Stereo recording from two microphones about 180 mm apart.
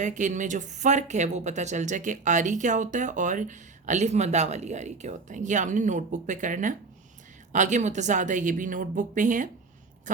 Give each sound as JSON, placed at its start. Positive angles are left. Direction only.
{"t": 0.0, "sound": "speech", "side_deg": -45}